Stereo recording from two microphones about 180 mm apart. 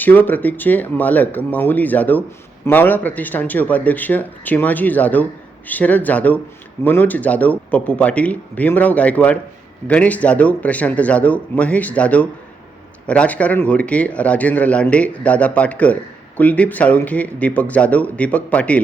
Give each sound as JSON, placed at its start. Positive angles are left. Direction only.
{"t": 0.0, "sound": "speech", "side_deg": 10}